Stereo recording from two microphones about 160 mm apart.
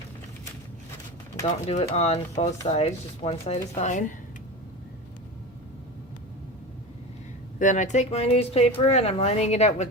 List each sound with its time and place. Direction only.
1.6 s speech: 40° left (ahead or behind)
7.6 s speech: 50° left (ahead or behind)